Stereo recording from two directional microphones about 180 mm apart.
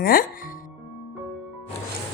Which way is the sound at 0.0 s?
55° left (ahead or behind).